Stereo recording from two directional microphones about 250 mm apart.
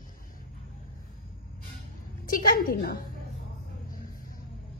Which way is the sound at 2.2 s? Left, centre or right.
Left.